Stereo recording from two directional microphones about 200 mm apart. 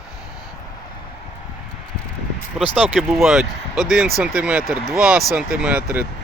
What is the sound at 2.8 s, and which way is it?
Speech, centre (ahead or behind).